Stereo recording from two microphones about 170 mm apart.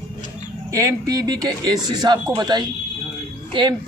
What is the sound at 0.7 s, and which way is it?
A man's voice, 20° right (ahead or behind).